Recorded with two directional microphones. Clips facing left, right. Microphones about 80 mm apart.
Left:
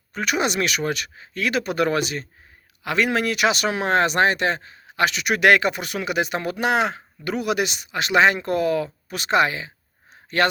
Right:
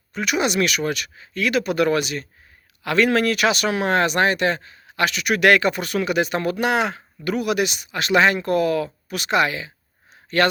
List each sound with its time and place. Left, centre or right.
0.1 s speech: left
2.8 s speech: centre